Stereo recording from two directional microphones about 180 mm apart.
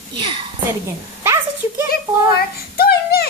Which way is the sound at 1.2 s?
15° right (ahead or behind).